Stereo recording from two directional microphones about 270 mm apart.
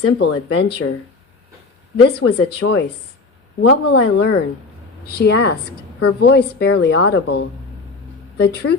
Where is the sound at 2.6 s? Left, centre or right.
Left.